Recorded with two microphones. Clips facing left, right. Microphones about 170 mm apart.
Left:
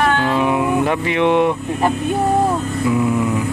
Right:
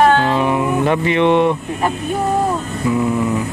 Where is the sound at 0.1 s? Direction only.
30° right (ahead or behind).